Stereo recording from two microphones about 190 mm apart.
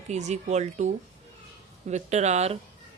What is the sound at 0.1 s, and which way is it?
Speech, 35° right (ahead or behind).